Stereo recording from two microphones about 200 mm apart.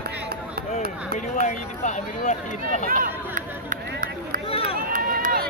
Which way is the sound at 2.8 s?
45° right (ahead or behind).